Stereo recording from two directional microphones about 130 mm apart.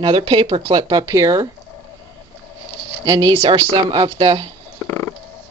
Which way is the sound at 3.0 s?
35° right (ahead or behind).